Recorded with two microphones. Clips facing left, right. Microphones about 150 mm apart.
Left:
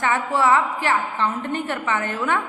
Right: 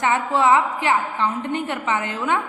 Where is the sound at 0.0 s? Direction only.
20° right (ahead or behind).